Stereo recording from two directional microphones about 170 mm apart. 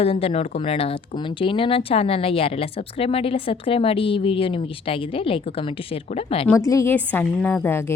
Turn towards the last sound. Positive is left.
turn(degrees=15)  # may be behind; listen again after turning